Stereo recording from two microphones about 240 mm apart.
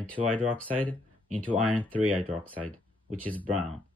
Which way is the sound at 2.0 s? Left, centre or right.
Centre.